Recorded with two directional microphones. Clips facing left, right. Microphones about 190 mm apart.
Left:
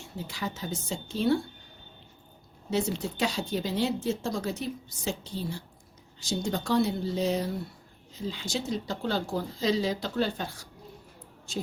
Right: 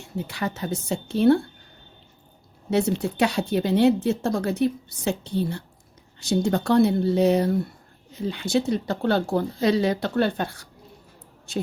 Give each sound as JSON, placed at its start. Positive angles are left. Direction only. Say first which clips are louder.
{"t": 0.3, "sound": "speech", "louder": "right 5 dB", "side_deg": -65}
{"t": 2.6, "sound": "speech", "louder": "right 6 dB", "side_deg": -65}